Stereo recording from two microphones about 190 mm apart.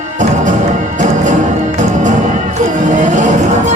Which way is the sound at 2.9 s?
40° right (ahead or behind).